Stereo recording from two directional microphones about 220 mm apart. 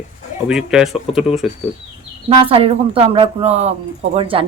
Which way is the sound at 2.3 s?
25° right (ahead or behind).